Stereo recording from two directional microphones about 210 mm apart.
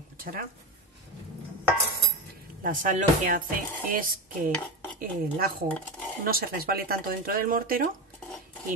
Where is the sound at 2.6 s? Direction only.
40° right (ahead or behind).